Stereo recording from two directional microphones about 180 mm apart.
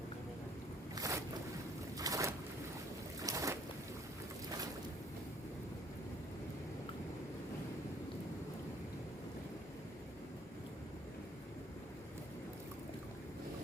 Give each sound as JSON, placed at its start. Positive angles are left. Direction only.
{"t": 0.9, "sound": "boat", "side_deg": -20}